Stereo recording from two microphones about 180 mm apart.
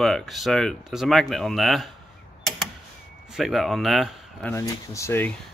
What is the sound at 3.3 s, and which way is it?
Speech, centre (ahead or behind).